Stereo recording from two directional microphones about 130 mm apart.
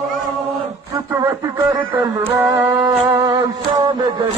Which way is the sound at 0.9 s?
25° right (ahead or behind).